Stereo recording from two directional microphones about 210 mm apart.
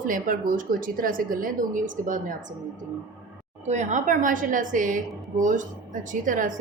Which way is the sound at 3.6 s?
35° right (ahead or behind).